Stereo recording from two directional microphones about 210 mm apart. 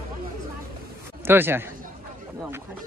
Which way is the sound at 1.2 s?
10° right (ahead or behind).